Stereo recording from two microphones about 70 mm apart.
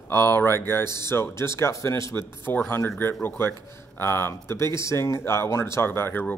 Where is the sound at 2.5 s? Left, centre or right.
Left.